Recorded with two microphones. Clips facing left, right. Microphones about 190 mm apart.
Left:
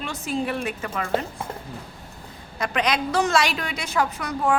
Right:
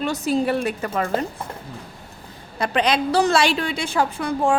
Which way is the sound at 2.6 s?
30° right (ahead or behind).